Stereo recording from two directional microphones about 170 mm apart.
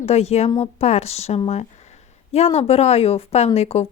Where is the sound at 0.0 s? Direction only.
40° left (ahead or behind).